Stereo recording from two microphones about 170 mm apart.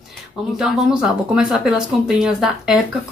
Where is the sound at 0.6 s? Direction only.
5° right (ahead or behind).